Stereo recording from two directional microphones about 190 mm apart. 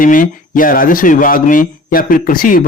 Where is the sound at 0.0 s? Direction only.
45° left (ahead or behind).